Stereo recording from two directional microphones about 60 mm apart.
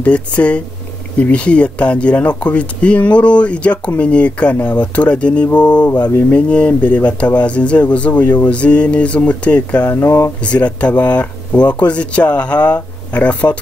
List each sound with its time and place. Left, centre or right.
0.0 s speech: left
9.8 s speech: left
10.4 s speech: left